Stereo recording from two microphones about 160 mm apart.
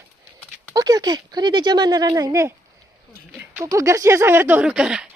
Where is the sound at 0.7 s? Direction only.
25° right (ahead or behind).